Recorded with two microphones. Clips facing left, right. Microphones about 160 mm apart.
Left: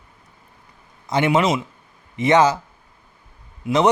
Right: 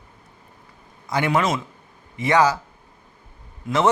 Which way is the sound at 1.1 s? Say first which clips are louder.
Left 3 dB; 20° left (ahead or behind).